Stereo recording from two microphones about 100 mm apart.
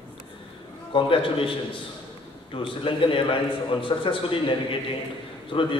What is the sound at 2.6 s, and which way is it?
A man's voice, 60° left (ahead or behind).